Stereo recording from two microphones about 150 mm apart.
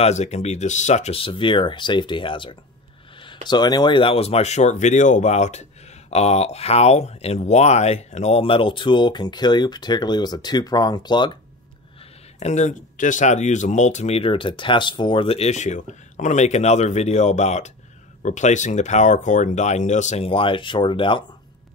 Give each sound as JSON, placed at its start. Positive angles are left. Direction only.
{"t": 0.0, "sound": "speech", "side_deg": 50}
{"t": 12.4, "sound": "speech", "side_deg": 50}
{"t": 20.2, "sound": "speech", "side_deg": 35}